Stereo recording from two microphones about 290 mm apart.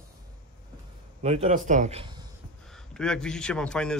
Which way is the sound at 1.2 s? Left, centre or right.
Right.